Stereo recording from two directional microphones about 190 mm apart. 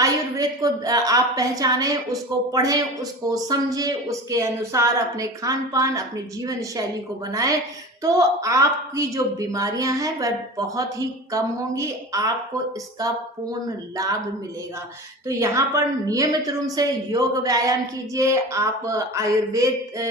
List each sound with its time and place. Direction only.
0.0 s a woman's voice: 20° right (ahead or behind)
13.5 s speech: 20° right (ahead or behind)
15.3 s a woman's voice: 15° right (ahead or behind)